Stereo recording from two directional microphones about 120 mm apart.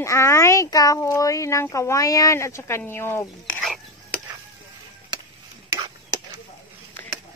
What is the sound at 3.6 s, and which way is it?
Stir, centre (ahead or behind).